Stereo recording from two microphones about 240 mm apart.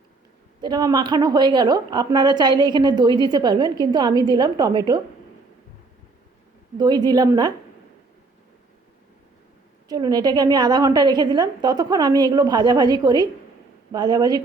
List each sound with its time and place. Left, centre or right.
0.6 s a woman's voice: centre
6.7 s a woman's voice: centre
9.9 s a woman's voice: centre